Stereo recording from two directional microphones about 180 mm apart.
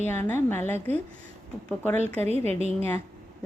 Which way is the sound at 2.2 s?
35° right (ahead or behind).